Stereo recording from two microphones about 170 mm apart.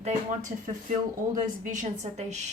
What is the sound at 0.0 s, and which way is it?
Speech, 45° right (ahead or behind).